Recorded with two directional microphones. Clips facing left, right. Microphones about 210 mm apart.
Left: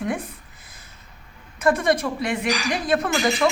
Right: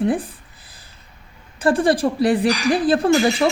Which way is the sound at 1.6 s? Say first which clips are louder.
Right 3 dB; 30° right (ahead or behind).